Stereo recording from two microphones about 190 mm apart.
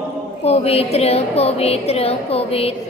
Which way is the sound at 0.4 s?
35° left (ahead or behind).